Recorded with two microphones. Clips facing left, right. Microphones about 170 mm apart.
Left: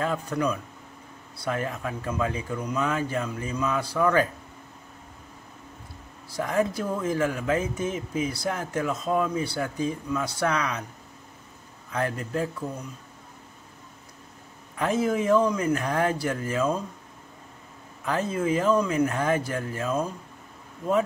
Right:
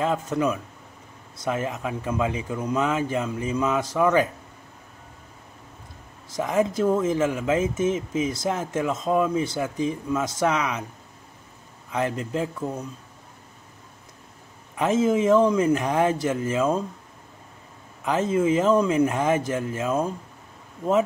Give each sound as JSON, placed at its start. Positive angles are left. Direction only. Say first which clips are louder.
{"t": 0.0, "sound": "speech", "louder": "right 3 dB", "side_deg": -20}
{"t": 6.3, "sound": "speech", "louder": "right 3 dB", "side_deg": -20}
{"t": 11.9, "sound": "speech", "louder": "right 2 dB", "side_deg": -20}
{"t": 14.8, "sound": "speech", "louder": "right 4 dB", "side_deg": -20}
{"t": 18.0, "sound": "speech", "louder": "right 4 dB", "side_deg": -20}